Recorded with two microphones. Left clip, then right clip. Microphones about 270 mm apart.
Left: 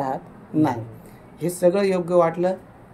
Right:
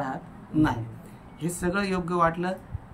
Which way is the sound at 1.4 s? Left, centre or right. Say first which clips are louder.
Left 10 dB; centre.